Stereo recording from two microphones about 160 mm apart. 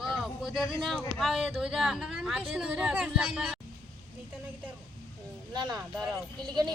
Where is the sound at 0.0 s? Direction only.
Centre (ahead or behind).